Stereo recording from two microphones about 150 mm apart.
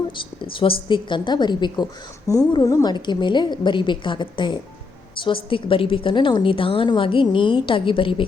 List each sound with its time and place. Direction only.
0.5 s a woman's voice: 35° left (ahead or behind)